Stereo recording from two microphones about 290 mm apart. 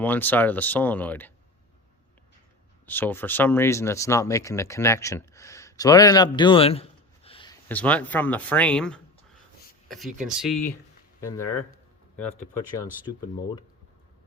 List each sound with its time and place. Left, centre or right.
0.0 s speech: centre
2.8 s speech: centre
7.3 s a sound: centre
7.7 s speech: centre
10.2 s speech: centre
11.2 s speech: centre